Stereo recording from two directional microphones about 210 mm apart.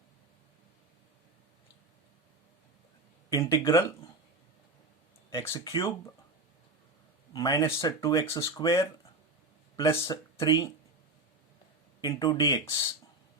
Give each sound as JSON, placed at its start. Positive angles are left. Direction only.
{"t": 3.2, "sound": "speech", "side_deg": 15}
{"t": 5.3, "sound": "speech", "side_deg": 15}
{"t": 7.3, "sound": "speech", "side_deg": 15}
{"t": 12.0, "sound": "speech", "side_deg": 20}